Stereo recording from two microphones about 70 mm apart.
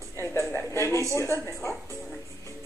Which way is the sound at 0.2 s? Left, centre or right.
Left.